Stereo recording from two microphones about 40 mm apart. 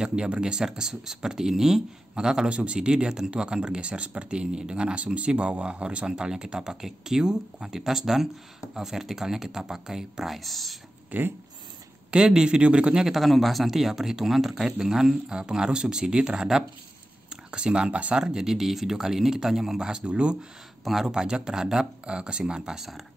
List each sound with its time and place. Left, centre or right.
0.0 s speech: right; by 10.8 s centre
11.1 s speech: right
12.1 s speech: right
13.0 s speech: centre; by 18.2 s right
18.2 s speech: centre
20.1 s speech: right
20.8 s speech: centre
21.1 s speech: centre